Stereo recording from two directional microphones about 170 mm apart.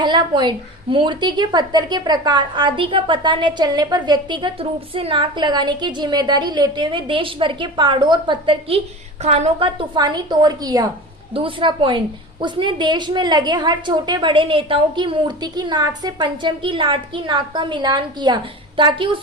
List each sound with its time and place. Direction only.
0.0 s a woman's voice: 25° right (ahead or behind)